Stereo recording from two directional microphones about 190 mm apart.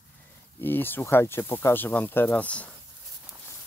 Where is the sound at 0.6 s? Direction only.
10° left (ahead or behind).